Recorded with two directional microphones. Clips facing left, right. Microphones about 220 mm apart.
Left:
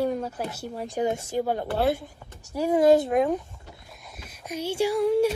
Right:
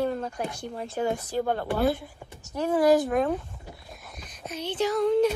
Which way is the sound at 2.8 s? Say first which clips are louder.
Left 2 dB; 25° left (ahead or behind).